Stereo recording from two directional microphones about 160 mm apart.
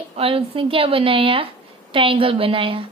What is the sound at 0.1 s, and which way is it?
A woman's voice, 35° right (ahead or behind).